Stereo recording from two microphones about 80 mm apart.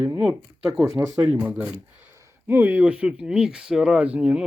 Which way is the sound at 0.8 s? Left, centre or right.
Right.